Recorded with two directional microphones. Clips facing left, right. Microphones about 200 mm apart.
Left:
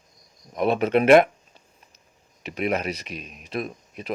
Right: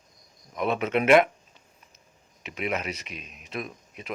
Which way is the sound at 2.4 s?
40° left (ahead or behind).